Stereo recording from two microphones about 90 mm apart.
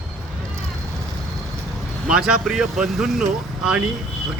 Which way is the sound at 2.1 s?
10° right (ahead or behind).